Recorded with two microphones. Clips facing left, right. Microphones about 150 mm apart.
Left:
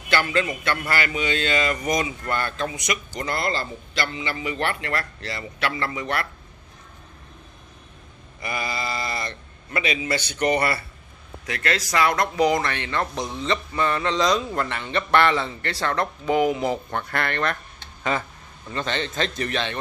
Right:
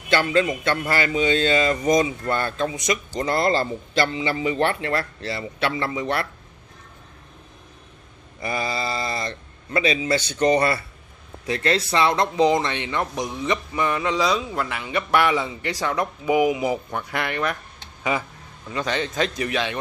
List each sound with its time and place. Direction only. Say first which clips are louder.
0.1 s a man's voice: right 3 dB; 25° right (ahead or behind)
8.4 s a man's voice: right 3 dB; 25° right (ahead or behind); by 19.8 s 10° right (ahead or behind)